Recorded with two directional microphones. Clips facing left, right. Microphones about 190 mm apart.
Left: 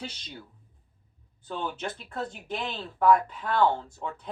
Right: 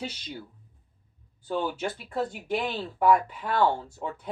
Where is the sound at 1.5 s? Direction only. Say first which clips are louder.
Right 4 dB; 10° right (ahead or behind).